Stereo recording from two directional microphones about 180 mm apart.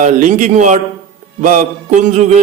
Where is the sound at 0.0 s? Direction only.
40° right (ahead or behind).